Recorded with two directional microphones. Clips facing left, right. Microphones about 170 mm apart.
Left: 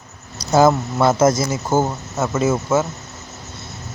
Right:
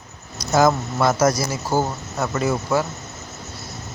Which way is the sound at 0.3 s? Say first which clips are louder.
Left 3 dB; 30° left (ahead or behind).